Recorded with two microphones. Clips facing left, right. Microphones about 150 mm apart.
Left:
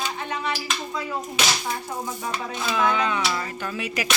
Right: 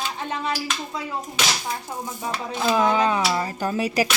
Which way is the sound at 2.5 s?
35° right (ahead or behind).